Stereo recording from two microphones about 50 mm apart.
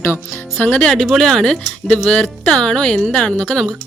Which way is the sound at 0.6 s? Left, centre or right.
Left.